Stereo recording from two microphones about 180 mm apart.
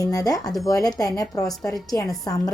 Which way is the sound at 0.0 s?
20° left (ahead or behind).